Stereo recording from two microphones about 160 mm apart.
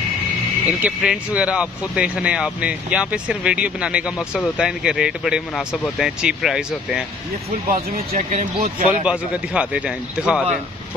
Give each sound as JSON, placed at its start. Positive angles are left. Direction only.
{"t": 0.7, "sound": "speech", "side_deg": -5}
{"t": 8.1, "sound": "speech", "side_deg": -45}
{"t": 8.6, "sound": "speech", "side_deg": -60}
{"t": 9.0, "sound": "a man's voice", "side_deg": -5}